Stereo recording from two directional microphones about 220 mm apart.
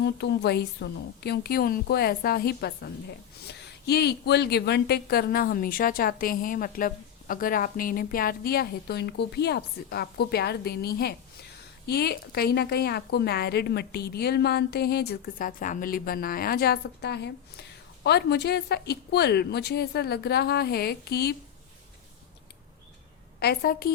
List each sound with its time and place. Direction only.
0.0 s a woman's voice: 50° left (ahead or behind)
23.4 s a woman's voice: 45° left (ahead or behind)